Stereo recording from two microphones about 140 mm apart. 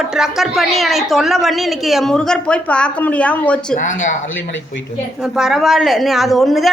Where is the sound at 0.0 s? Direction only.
5° right (ahead or behind).